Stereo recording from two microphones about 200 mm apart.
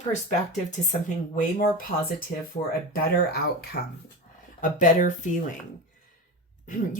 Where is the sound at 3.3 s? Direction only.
50° left (ahead or behind).